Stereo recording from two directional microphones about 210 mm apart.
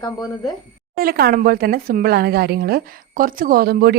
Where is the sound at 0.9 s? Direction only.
45° right (ahead or behind).